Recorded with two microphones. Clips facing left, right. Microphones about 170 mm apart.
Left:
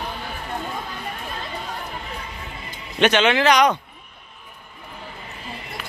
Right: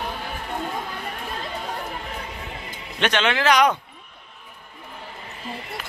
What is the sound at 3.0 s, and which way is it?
Speech, 5° left (ahead or behind).